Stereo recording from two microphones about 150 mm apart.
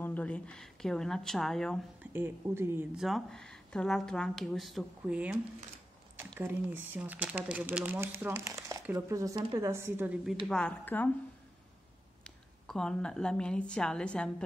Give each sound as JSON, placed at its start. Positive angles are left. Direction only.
{"t": 0.0, "sound": "speech", "side_deg": 10}
{"t": 2.1, "sound": "speech", "side_deg": -15}
{"t": 3.0, "sound": "speech", "side_deg": 0}
{"t": 6.4, "sound": "speech", "side_deg": -15}
{"t": 10.5, "sound": "a woman's voice", "side_deg": 10}
{"t": 12.6, "sound": "speech", "side_deg": 5}